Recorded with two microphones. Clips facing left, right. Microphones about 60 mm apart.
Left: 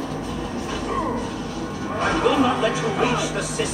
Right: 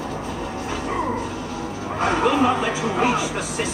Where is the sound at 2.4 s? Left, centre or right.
Right.